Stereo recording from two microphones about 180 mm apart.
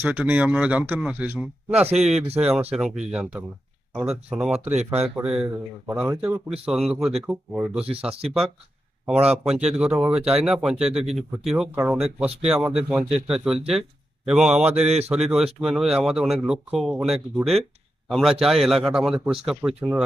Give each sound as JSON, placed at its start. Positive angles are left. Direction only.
{"t": 0.0, "sound": "speech", "side_deg": -10}
{"t": 9.3, "sound": "speech", "side_deg": -5}
{"t": 14.8, "sound": "a man's voice", "side_deg": -35}
{"t": 15.1, "sound": "speech", "side_deg": -5}